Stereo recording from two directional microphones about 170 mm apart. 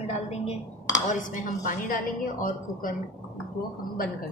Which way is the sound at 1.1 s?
50° left (ahead or behind).